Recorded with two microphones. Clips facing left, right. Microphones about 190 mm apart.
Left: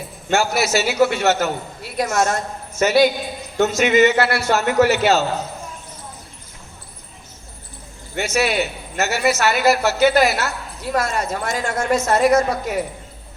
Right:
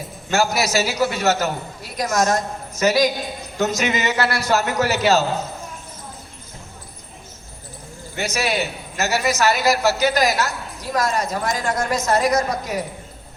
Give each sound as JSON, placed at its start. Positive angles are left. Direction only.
{"t": 0.3, "sound": "a woman's voice", "side_deg": -40}
{"t": 8.2, "sound": "a woman's voice", "side_deg": -40}